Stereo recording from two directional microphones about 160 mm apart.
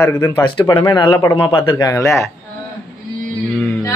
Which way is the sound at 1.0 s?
20° left (ahead or behind).